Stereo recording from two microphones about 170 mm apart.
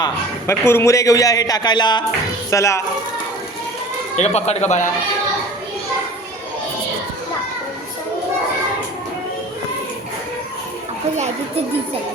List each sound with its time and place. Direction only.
0.0 s a man's voice: 15° left (ahead or behind)
4.2 s speech: 40° left (ahead or behind)